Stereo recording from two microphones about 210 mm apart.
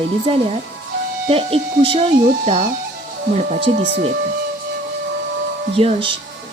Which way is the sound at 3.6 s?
55° right (ahead or behind).